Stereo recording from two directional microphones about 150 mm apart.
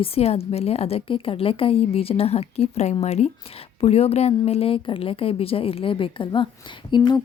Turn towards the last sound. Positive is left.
turn(degrees=30)  # may be behind; listen again after turning